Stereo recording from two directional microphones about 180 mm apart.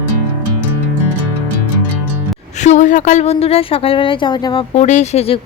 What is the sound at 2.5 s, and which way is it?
A woman's voice, 40° left (ahead or behind).